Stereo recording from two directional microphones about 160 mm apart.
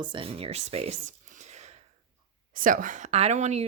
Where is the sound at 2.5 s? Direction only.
55° right (ahead or behind).